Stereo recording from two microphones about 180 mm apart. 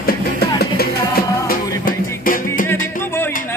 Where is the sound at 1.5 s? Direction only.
50° left (ahead or behind).